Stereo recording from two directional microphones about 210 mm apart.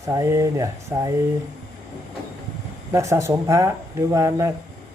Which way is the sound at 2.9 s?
15° right (ahead or behind).